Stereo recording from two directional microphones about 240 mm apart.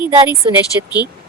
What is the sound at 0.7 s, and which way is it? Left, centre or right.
Speech, centre.